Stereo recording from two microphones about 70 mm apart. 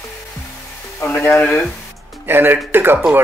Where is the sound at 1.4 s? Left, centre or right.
Centre.